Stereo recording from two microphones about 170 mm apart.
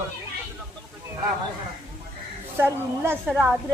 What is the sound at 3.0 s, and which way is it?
Speech, 15° right (ahead or behind).